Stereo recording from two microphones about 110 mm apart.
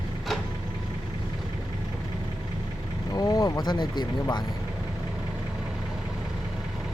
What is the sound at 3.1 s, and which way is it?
Speech, 35° left (ahead or behind).